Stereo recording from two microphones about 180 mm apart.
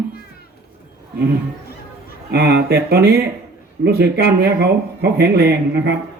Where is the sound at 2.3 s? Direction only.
65° right (ahead or behind).